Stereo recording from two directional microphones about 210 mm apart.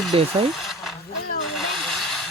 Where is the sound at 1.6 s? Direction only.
Centre (ahead or behind).